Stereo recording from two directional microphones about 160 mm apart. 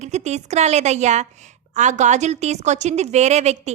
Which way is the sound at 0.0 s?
45° right (ahead or behind).